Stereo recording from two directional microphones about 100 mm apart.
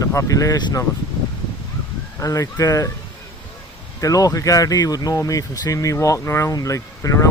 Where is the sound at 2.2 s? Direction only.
35° left (ahead or behind).